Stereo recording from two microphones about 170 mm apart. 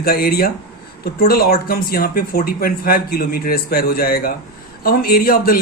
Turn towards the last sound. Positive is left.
turn(degrees=60)  # may be behind; listen again after turning